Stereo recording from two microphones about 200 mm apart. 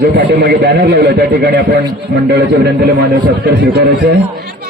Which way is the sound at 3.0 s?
60° right (ahead or behind).